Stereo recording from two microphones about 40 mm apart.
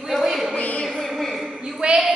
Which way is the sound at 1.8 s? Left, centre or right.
Right.